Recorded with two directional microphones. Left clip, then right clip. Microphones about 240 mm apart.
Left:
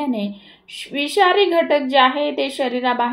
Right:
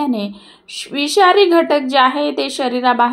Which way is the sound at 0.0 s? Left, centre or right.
Right.